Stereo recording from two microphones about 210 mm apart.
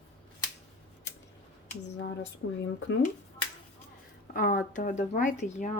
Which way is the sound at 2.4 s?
65° left (ahead or behind).